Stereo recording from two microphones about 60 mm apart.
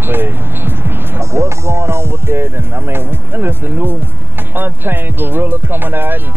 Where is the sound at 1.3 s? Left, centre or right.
Right.